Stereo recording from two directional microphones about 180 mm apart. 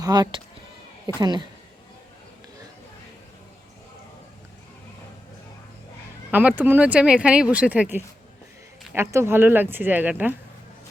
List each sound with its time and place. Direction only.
0.0 s speech: 25° right (ahead or behind)
6.3 s speech: 10° right (ahead or behind)